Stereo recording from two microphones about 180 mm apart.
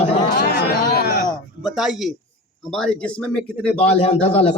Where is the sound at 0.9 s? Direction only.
60° left (ahead or behind).